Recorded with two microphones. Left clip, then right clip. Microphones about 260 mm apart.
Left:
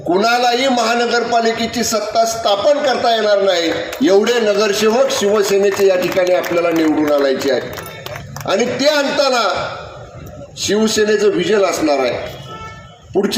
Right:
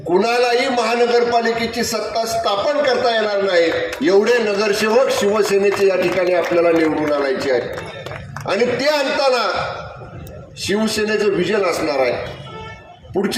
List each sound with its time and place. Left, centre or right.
0.2 s a man's voice: left
8.4 s a man's voice: left
10.6 s a man's voice: left